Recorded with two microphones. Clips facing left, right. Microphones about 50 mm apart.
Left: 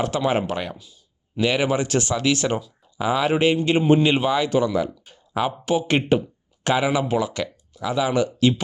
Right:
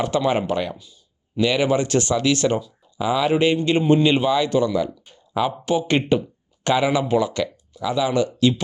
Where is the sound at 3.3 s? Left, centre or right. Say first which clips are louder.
Even; centre.